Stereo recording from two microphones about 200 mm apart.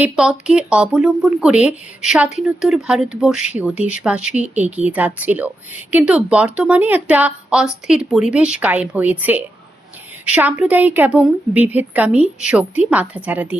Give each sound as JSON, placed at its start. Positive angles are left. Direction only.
{"t": 0.0, "sound": "a woman's voice", "side_deg": -5}